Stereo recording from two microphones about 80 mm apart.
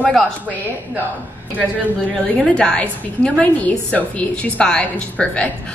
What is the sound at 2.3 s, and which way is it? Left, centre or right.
A woman's voice, centre.